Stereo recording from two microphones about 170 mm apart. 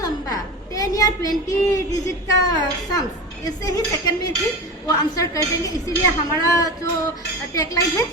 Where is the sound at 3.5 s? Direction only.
20° left (ahead or behind).